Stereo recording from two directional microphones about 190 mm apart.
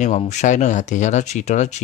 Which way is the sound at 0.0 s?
40° left (ahead or behind).